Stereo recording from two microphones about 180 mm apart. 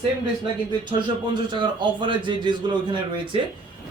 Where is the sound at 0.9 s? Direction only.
25° right (ahead or behind).